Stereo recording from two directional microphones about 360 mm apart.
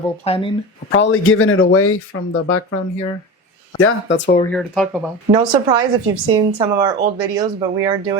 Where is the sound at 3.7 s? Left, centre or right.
Left.